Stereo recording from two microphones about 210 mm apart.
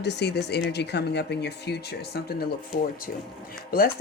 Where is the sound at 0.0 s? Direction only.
55° left (ahead or behind).